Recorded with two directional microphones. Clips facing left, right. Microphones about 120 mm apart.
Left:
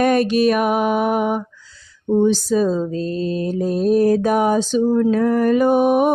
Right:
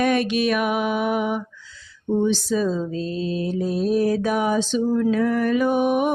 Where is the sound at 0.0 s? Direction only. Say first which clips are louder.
Left 5 dB; 40° left (ahead or behind).